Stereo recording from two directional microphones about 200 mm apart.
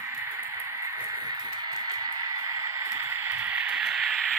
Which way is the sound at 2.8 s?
10° right (ahead or behind).